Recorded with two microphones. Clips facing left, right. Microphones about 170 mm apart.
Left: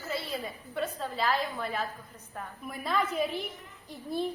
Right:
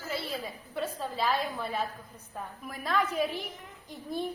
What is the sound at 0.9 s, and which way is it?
A woman's voice, 5° right (ahead or behind).